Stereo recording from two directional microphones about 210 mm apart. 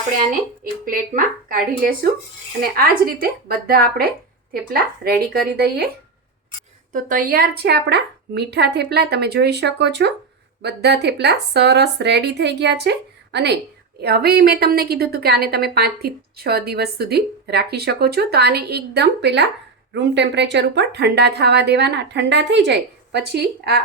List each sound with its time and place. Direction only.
0.9 s a woman's voice: 45° right (ahead or behind)
4.7 s a woman's voice: 45° right (ahead or behind)
6.9 s a woman's voice: 40° right (ahead or behind)